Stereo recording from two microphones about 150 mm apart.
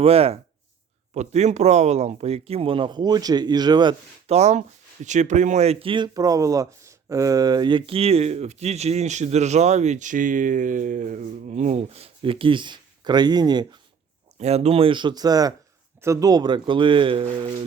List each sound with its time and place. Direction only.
0.0 s speech: 40° right (ahead or behind)
4.3 s speech: 45° right (ahead or behind); by 13.7 s 30° right (ahead or behind)
14.3 s speech: 45° right (ahead or behind)